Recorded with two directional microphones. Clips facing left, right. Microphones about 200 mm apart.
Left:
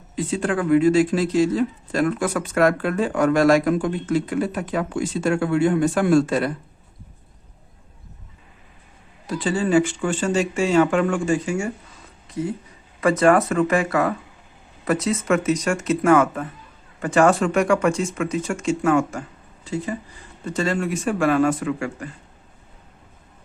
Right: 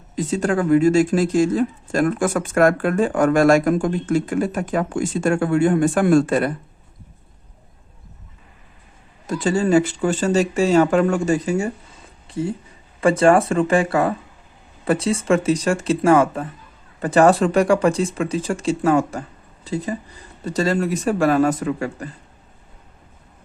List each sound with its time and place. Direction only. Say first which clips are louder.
0.2 s speech: right 3 dB; 40° right (ahead or behind)
9.2 s speech: right 3 dB; 45° right (ahead or behind)